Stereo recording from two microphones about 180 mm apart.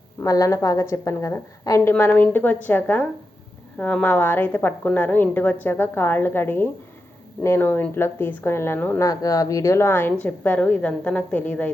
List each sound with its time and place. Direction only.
0.2 s a woman's voice: 20° left (ahead or behind)